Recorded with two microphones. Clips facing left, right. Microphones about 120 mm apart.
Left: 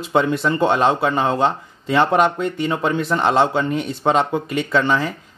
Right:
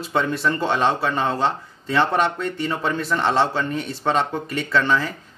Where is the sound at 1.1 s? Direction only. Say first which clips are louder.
Left 3 dB; 10° left (ahead or behind).